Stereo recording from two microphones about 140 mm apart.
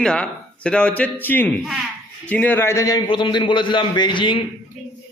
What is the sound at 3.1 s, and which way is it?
A man's voice, 35° left (ahead or behind).